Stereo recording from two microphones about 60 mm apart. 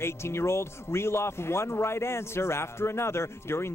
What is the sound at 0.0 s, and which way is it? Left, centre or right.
Speech, left.